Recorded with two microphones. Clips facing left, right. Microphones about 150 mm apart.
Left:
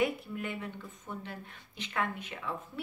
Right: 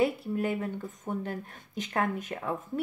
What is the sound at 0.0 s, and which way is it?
Speech, 40° right (ahead or behind).